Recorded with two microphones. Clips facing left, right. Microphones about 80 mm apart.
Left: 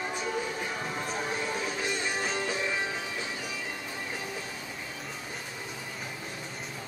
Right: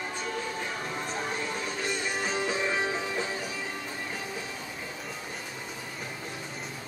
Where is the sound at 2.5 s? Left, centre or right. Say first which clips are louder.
Right 3 dB; right.